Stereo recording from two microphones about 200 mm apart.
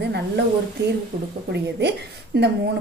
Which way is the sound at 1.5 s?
60° right (ahead or behind).